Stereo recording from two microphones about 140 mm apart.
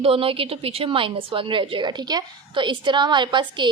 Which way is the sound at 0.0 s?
40° right (ahead or behind).